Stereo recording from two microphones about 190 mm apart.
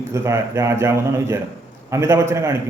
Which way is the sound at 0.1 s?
15° right (ahead or behind).